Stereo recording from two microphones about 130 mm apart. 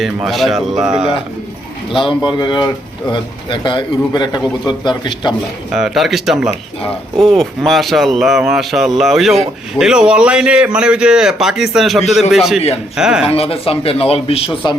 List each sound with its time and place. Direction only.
0.0 s speech: centre (ahead or behind)
2.0 s a man's voice: 35° left (ahead or behind)
5.7 s speech: centre (ahead or behind)
12.5 s speech: 50° left (ahead or behind)
13.0 s speech: 5° right (ahead or behind)
13.2 s speech: 50° left (ahead or behind)